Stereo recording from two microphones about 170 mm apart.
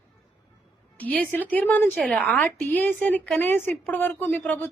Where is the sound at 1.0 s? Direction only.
10° left (ahead or behind).